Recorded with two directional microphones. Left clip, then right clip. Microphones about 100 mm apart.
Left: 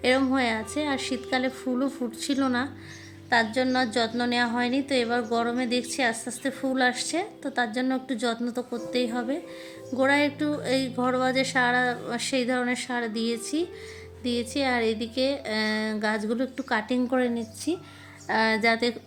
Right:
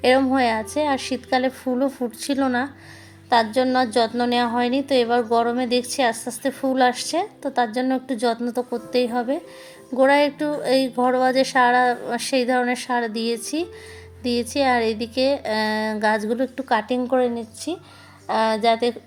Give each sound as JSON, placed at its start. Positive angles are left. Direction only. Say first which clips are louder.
{"t": 0.0, "sound": "a woman's voice", "louder": "right 6 dB", "side_deg": -40}
{"t": 17.0, "sound": "a woman's voice", "louder": "right 5 dB", "side_deg": -10}